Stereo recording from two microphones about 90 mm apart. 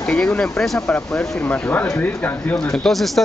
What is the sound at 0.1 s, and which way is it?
Speech, 10° left (ahead or behind).